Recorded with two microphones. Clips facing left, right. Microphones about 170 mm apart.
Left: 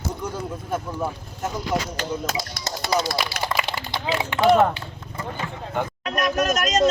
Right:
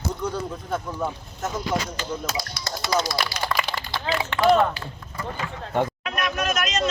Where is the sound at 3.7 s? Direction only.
20° left (ahead or behind).